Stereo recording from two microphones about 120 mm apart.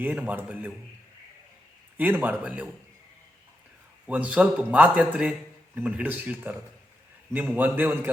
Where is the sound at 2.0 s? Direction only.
15° right (ahead or behind).